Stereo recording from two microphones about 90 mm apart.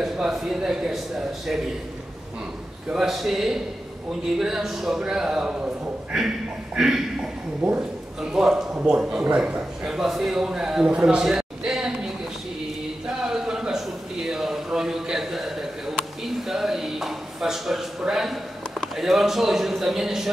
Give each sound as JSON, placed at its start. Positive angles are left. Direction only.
{"t": 0.0, "sound": "a man's voice", "side_deg": -5}
{"t": 2.9, "sound": "a man's voice", "side_deg": -5}
{"t": 13.2, "sound": "a sound", "side_deg": -5}